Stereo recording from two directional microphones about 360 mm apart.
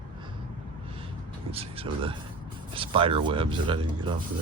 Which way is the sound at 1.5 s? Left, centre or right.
Centre.